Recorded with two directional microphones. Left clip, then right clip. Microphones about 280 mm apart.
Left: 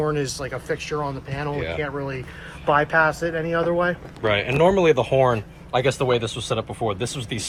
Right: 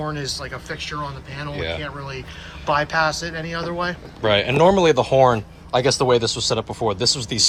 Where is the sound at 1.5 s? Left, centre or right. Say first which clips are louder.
Right 4 dB; centre.